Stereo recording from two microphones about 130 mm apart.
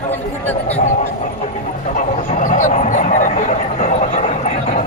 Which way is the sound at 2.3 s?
75° left (ahead or behind).